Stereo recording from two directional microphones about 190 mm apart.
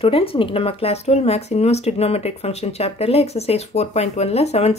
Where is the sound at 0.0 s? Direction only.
30° left (ahead or behind).